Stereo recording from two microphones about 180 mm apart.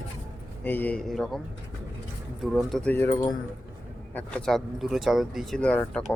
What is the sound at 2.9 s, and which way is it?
Speech, 15° left (ahead or behind).